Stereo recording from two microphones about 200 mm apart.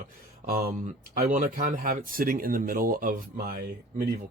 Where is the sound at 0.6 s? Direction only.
50° right (ahead or behind).